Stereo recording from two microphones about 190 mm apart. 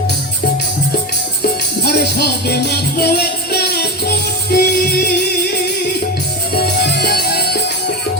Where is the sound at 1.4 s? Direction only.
55° left (ahead or behind).